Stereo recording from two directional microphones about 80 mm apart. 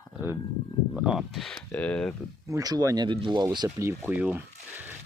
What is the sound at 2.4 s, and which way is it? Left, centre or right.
Speech, right.